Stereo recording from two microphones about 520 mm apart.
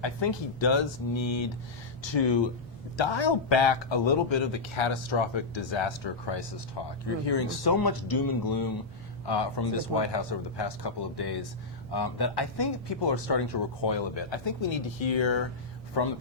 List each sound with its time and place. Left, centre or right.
0.0 s speech: left